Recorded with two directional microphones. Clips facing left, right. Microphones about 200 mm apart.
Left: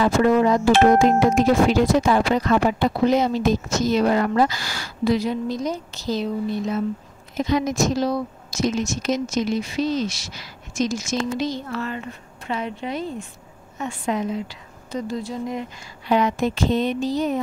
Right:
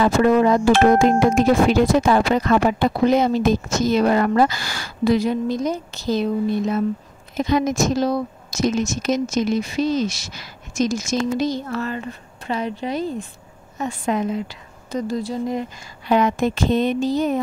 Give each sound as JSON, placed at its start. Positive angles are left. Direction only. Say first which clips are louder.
{"t": 0.0, "sound": "speech", "louder": "right 2 dB", "side_deg": -55}
{"t": 7.3, "sound": "a woman's voice", "louder": "right 2 dB", "side_deg": -55}
{"t": 16.1, "sound": "speech", "louder": "right 2 dB", "side_deg": -50}